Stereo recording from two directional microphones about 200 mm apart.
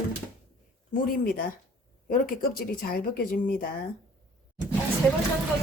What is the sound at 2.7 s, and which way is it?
Speech, 50° left (ahead or behind).